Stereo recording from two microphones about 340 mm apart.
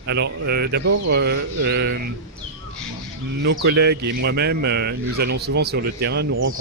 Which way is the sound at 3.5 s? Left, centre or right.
Right.